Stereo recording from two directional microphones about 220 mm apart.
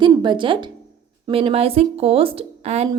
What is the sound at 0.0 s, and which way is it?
A woman's voice, 20° right (ahead or behind).